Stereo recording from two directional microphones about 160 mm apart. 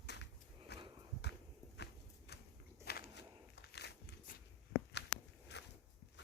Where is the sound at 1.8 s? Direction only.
90° left.